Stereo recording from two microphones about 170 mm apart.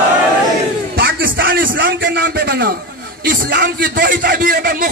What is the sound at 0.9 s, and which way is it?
A man's voice, 60° right (ahead or behind).